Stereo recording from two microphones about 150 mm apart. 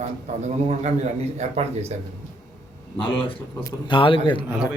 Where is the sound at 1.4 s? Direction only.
45° right (ahead or behind).